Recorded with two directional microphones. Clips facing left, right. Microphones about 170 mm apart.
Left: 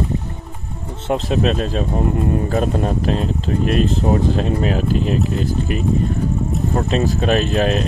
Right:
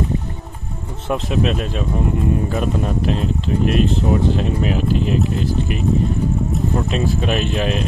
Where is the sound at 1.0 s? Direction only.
30° left (ahead or behind).